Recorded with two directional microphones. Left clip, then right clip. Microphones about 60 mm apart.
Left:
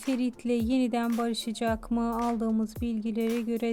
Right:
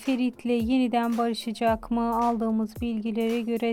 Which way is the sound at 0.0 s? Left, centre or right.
Right.